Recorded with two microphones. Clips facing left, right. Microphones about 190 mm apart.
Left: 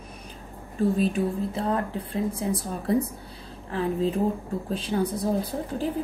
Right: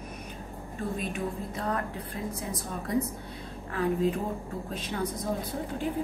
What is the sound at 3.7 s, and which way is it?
A woman's voice, 30° left (ahead or behind).